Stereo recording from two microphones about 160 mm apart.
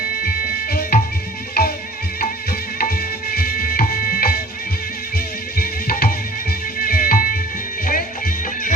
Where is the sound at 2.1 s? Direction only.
65° left (ahead or behind).